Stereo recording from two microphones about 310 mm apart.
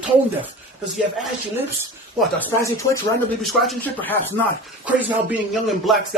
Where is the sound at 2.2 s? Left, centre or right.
Centre.